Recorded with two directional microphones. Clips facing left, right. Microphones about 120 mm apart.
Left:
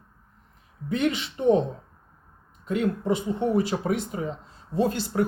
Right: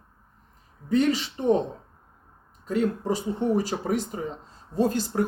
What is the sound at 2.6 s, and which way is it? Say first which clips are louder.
Speech: even; 35° right (ahead or behind).